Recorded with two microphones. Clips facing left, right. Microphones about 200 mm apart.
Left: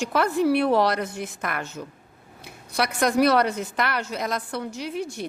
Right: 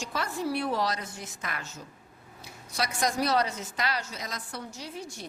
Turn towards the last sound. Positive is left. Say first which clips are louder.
# left 9 dB
turn(degrees=65)  # may be behind; listen again after turning